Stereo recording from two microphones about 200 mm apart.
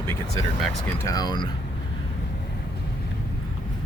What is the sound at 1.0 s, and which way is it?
Speech, 15° left (ahead or behind).